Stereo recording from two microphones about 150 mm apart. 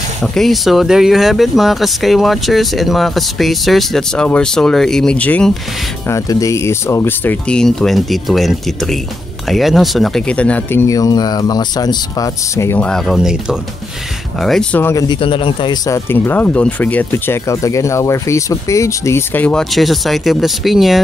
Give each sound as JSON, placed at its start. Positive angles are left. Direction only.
{"t": 0.2, "sound": "speech", "side_deg": 0}
{"t": 6.0, "sound": "speech", "side_deg": 20}
{"t": 15.0, "sound": "speech", "side_deg": 35}